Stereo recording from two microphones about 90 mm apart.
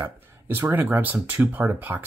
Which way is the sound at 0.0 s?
25° right (ahead or behind).